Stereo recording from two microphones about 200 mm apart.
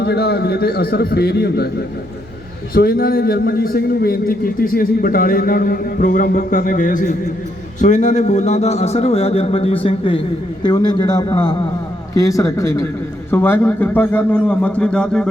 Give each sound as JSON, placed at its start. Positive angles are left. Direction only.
{"t": 0.0, "sound": "speech", "side_deg": 55}
{"t": 2.7, "sound": "a man's voice", "side_deg": 50}